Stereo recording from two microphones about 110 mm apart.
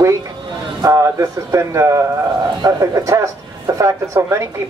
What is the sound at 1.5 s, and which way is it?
Speech, 25° right (ahead or behind).